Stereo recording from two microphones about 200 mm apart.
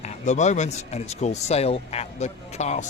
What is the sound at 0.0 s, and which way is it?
Speech, 35° left (ahead or behind).